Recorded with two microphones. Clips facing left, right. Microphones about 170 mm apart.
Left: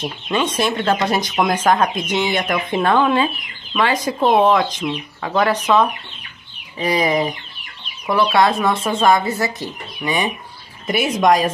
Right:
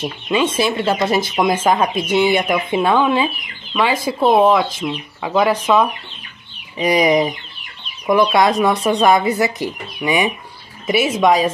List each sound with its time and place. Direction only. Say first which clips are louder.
0.0 s speech: right 3 dB; 5° right (ahead or behind)
6.8 s speech: right 3 dB; 15° right (ahead or behind)
10.9 s a woman's voice: right 1 dB; 5° right (ahead or behind)